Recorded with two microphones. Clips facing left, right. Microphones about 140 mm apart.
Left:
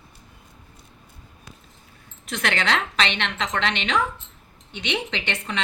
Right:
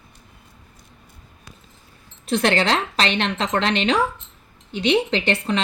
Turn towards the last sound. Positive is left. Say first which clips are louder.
# right 8 dB
turn(degrees=-35)  # may be behind; listen again after turning